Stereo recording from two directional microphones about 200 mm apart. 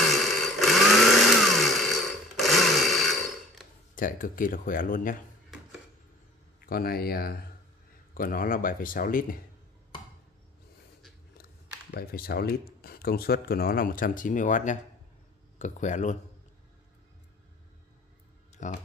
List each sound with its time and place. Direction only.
0.0 s a sound: centre (ahead or behind)
3.9 s speech: 40° left (ahead or behind)
6.6 s speech: 50° left (ahead or behind)
11.9 s speech: 50° left (ahead or behind)
18.6 s speech: 40° left (ahead or behind)